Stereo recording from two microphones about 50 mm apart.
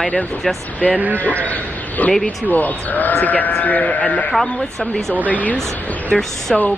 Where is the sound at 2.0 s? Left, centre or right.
Left.